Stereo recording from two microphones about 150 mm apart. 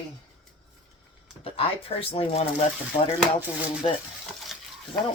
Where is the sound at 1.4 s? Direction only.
40° left (ahead or behind).